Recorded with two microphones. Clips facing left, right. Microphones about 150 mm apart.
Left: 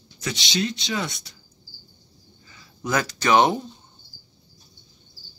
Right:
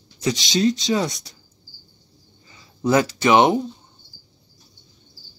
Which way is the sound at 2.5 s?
25° right (ahead or behind).